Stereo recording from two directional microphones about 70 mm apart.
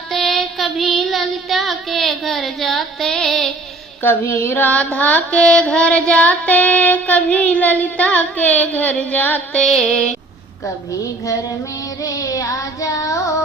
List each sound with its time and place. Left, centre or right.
0.1 s child singing: centre
4.0 s child singing: left
9.6 s music: centre
12.0 s child singing: left